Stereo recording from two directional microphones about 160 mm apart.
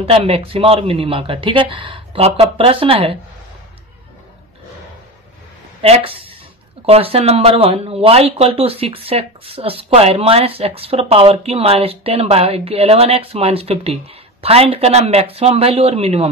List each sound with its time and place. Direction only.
0.0 s speech: 35° right (ahead or behind)
5.8 s speech: 35° right (ahead or behind)